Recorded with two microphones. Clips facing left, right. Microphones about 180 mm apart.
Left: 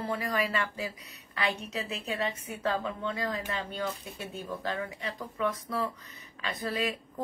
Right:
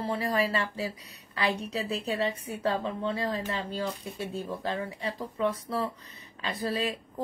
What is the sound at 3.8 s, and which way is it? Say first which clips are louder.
Speech: right 1 dB; centre (ahead or behind).